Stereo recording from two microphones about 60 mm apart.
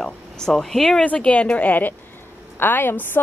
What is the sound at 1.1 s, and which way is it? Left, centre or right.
A woman's voice, left.